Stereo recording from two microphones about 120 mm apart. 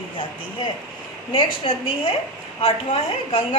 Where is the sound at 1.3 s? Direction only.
50° left (ahead or behind).